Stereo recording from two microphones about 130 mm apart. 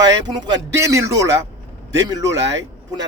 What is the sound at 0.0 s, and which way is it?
Speech, 30° right (ahead or behind).